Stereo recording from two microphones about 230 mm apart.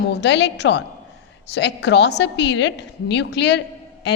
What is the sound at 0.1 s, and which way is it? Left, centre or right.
A woman's voice, left.